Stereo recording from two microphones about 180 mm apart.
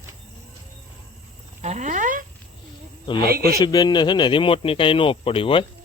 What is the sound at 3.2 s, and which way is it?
Speech, 60° right (ahead or behind).